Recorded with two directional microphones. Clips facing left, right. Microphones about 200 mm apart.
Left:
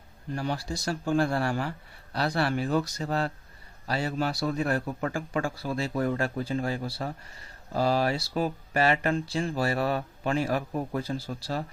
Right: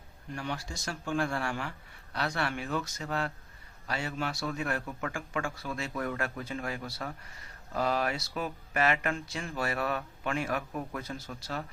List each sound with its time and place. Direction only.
0.3 s a man's voice: 35° left (ahead or behind)